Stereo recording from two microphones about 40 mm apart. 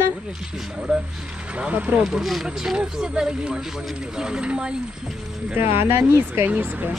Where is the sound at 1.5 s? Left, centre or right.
Right.